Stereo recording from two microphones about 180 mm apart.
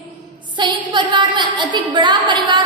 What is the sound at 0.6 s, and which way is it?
A woman's voice, 25° right (ahead or behind).